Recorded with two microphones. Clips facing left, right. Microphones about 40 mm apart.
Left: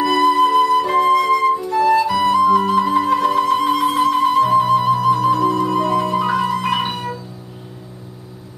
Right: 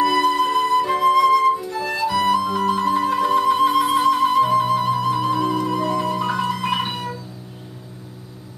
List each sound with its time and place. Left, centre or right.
0.0 s flute: centre
1.1 s music: centre
5.6 s music: centre